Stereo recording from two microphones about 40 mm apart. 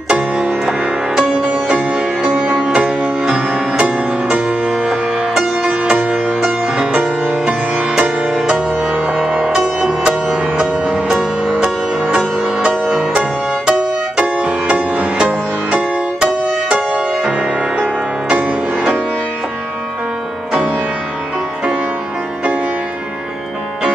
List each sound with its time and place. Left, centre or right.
0.1 s music: right
4.6 s music: centre
7.4 s music: centre
8.5 s music: right
12.6 s music: right